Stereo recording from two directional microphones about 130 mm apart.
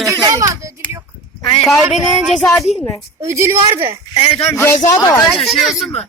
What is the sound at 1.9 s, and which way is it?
Speech, 5° right (ahead or behind).